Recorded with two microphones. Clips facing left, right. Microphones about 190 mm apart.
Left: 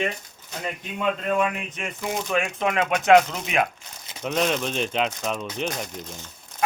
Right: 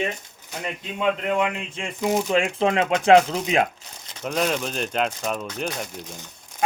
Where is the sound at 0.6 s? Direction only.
20° right (ahead or behind).